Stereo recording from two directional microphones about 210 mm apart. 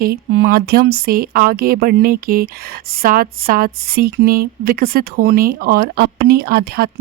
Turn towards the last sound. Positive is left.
turn(degrees=-45)  # may be behind; listen again after turning